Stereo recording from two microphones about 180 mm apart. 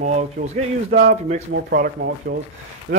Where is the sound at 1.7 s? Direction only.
55° right (ahead or behind).